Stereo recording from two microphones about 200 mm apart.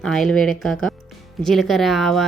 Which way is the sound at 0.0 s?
Centre (ahead or behind).